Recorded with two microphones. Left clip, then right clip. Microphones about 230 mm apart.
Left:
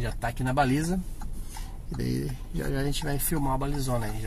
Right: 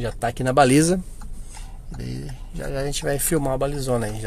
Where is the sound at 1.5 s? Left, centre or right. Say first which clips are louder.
Even; centre.